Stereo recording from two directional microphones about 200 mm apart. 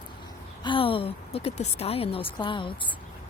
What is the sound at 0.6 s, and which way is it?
A woman's voice, 25° left (ahead or behind).